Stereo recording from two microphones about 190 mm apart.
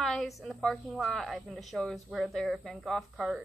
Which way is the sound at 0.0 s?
Centre (ahead or behind).